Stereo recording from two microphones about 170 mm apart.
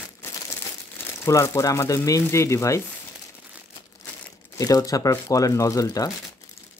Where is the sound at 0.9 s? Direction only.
15° left (ahead or behind).